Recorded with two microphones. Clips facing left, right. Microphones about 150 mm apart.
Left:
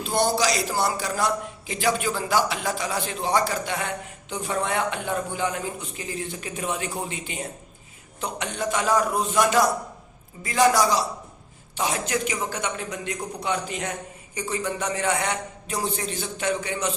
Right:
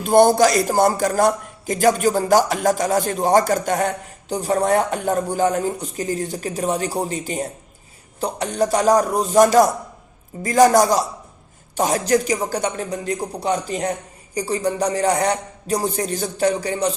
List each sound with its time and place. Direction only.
0.0 s a man's voice: 50° right (ahead or behind)